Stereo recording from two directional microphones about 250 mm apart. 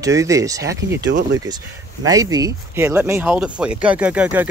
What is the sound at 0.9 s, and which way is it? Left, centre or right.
Speech, right.